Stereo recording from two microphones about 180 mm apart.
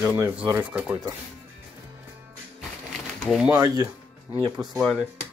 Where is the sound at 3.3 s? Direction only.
5° right (ahead or behind).